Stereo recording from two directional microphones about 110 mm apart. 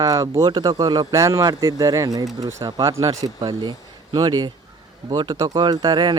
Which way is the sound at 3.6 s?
40° right (ahead or behind).